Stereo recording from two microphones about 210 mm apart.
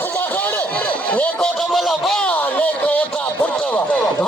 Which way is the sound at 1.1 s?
5° left (ahead or behind).